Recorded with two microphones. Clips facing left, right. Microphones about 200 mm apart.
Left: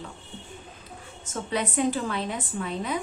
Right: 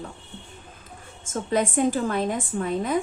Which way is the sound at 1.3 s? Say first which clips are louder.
Right 5 dB; 45° right (ahead or behind).